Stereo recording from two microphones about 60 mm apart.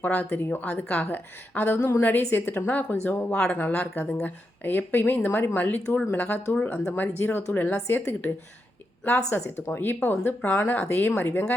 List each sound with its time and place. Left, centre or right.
0.0 s a woman's voice: left
3.3 s speech: centre
3.6 s a woman's voice: left
9.3 s speech: left